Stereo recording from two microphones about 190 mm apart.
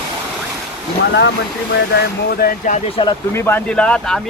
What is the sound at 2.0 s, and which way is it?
Speech, 55° left (ahead or behind).